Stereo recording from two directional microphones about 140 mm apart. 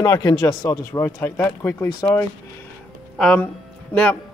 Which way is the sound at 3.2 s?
10° left (ahead or behind).